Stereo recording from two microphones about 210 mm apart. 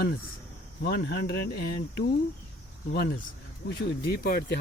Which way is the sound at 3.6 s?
50° left (ahead or behind).